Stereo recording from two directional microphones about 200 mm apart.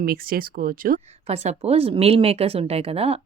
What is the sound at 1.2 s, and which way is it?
Speech, 30° right (ahead or behind).